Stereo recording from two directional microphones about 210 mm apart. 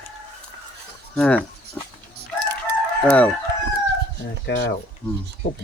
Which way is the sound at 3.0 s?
5° left (ahead or behind).